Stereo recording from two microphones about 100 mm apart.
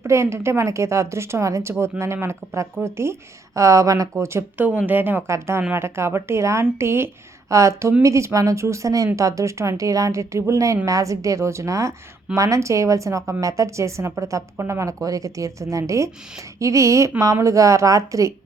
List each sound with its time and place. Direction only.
0.0 s speech: 25° right (ahead or behind)